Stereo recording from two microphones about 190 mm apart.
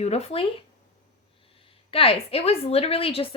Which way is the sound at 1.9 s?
30° left (ahead or behind).